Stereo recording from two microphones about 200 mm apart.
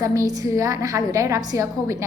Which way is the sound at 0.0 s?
15° right (ahead or behind).